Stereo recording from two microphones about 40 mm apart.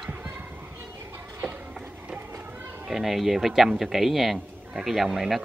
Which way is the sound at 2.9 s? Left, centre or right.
Centre.